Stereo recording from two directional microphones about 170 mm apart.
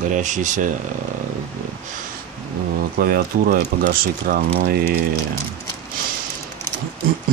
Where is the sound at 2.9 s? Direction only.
60° right (ahead or behind).